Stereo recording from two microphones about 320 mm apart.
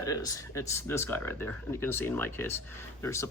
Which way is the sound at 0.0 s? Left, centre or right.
Centre.